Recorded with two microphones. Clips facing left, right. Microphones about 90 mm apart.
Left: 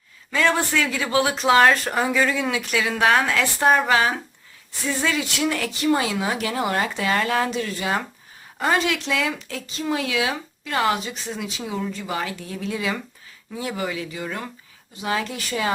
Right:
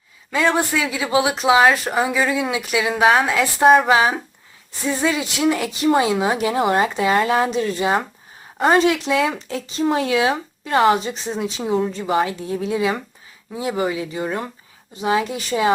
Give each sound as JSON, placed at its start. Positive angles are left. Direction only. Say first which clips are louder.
{"t": 0.3, "sound": "speech", "louder": "right 2 dB", "side_deg": -15}
{"t": 14.9, "sound": "speech", "louder": "right 6 dB", "side_deg": -20}